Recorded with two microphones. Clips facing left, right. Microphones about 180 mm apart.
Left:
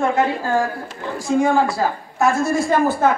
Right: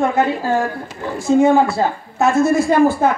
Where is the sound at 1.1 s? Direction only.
25° right (ahead or behind).